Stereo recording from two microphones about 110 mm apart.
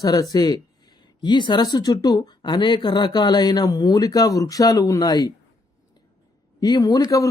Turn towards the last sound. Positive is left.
turn(degrees=35)  # may be behind; listen again after turning